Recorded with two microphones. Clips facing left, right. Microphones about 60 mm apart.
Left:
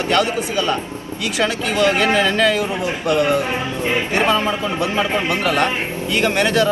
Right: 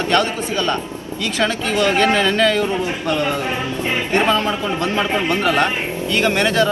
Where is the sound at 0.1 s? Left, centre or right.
Centre.